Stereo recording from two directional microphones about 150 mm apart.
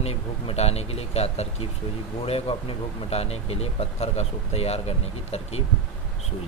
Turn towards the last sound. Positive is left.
turn(degrees=45)  # may be behind; listen again after turning